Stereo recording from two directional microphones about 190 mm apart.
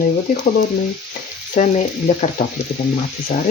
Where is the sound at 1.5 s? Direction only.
35° left (ahead or behind).